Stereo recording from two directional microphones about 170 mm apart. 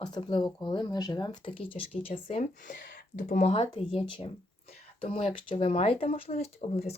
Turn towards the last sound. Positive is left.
turn(degrees=40)  # may be behind; listen again after turning